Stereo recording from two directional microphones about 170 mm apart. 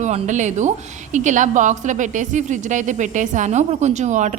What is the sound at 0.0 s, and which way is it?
A woman's voice, 45° right (ahead or behind).